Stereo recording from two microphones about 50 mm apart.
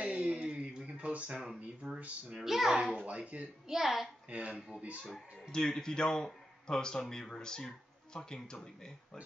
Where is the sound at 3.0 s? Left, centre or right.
Right.